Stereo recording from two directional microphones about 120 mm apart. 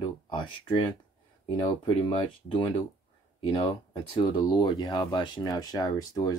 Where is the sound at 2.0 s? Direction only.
40° left (ahead or behind).